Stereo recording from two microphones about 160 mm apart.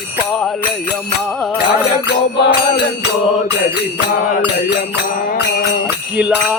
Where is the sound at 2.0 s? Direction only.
90° left.